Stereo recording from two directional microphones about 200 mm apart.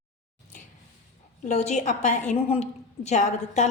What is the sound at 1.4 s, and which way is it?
A woman's voice, 35° left (ahead or behind).